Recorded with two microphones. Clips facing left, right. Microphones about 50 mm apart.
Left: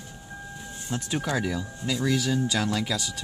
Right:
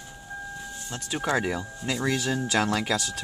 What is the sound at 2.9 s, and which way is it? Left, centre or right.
Speech, right.